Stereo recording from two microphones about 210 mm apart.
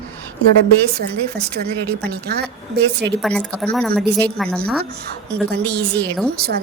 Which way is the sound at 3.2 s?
Centre (ahead or behind).